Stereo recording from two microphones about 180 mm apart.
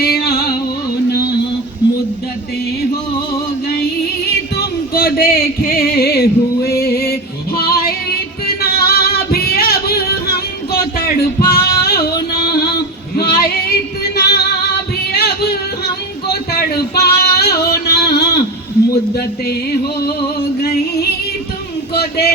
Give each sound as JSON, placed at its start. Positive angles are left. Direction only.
{"t": 0.0, "sound": "music", "side_deg": 60}
{"t": 4.3, "sound": "music", "side_deg": 60}
{"t": 11.5, "sound": "female singing", "side_deg": 60}
{"t": 12.4, "sound": "a sound", "side_deg": 60}
{"t": 13.1, "sound": "female singing", "side_deg": 60}
{"t": 14.2, "sound": "music", "side_deg": 65}
{"t": 15.1, "sound": "singing", "side_deg": 60}
{"t": 16.3, "sound": "music", "side_deg": 60}